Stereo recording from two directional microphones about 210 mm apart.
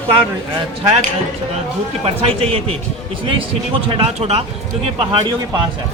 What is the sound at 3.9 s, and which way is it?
A man's voice, 25° right (ahead or behind).